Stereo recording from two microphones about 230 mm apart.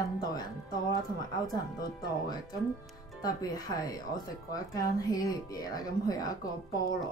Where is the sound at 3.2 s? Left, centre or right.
Centre.